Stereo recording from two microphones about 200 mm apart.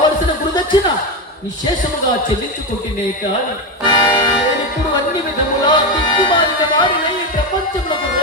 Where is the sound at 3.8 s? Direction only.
20° left (ahead or behind).